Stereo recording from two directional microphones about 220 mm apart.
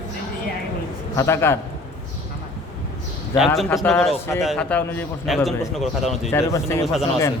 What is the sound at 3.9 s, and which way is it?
A man's voice, centre (ahead or behind).